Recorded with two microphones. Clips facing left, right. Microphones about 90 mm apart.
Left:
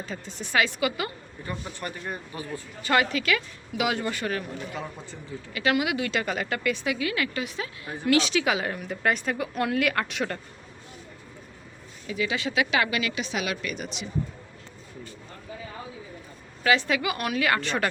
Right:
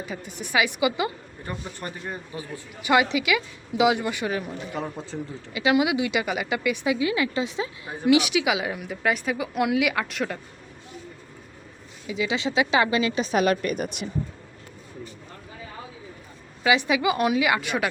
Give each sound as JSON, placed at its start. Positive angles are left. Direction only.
{"t": 0.0, "sound": "a woman's voice", "side_deg": -10}
{"t": 5.1, "sound": "a woman's voice", "side_deg": -50}
{"t": 5.5, "sound": "a woman's voice", "side_deg": -20}
{"t": 12.0, "sound": "speech", "side_deg": -20}
{"t": 13.3, "sound": "a woman's voice", "side_deg": -45}
{"t": 16.6, "sound": "a woman's voice", "side_deg": -15}